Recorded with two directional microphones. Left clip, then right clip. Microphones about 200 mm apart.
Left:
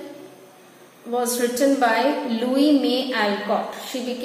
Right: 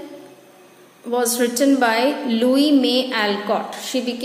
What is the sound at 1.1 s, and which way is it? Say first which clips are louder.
A woman's voice: right 3 dB; 45° right (ahead or behind).